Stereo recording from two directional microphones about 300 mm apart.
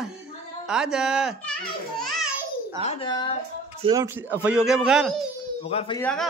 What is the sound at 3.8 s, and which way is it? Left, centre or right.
A man's voice, centre.